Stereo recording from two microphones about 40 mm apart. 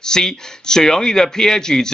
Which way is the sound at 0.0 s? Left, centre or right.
Centre.